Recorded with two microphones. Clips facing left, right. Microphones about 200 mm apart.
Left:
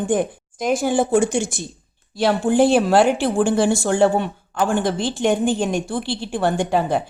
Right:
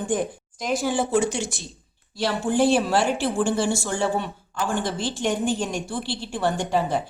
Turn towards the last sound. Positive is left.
turn(degrees=55)  # may be behind; listen again after turning